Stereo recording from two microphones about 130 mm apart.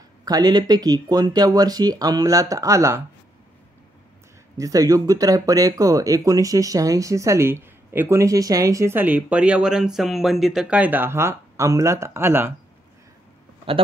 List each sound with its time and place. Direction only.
0.2 s speech: 30° right (ahead or behind)
4.6 s speech: 25° right (ahead or behind)